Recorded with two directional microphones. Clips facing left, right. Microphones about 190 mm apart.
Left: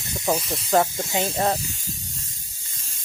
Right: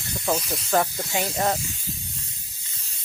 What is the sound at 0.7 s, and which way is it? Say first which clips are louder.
Speech: left 3 dB; 20° left (ahead or behind).